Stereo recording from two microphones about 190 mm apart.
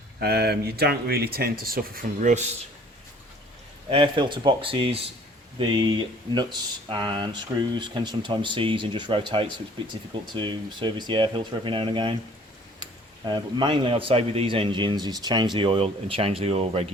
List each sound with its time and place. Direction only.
0.2 s speech: 55° right (ahead or behind); by 2.5 s 40° right (ahead or behind)
3.8 s speech: 25° right (ahead or behind)